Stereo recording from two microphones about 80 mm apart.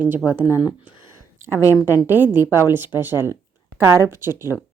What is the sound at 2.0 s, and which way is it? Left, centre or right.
Speech, right.